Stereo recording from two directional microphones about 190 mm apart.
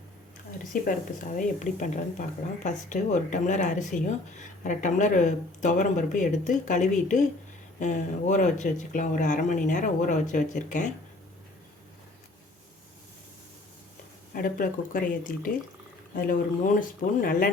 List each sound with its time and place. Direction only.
0.7 s speech: 45° left (ahead or behind)
14.3 s speech: 45° left (ahead or behind)